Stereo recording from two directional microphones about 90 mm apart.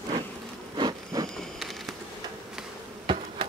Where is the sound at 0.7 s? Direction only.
50° right (ahead or behind).